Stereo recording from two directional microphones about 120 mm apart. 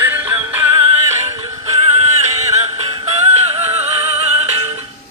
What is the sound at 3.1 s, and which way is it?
Music, 60° right (ahead or behind).